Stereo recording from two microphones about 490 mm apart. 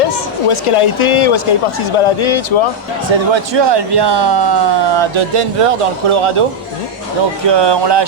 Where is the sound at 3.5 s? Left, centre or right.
Right.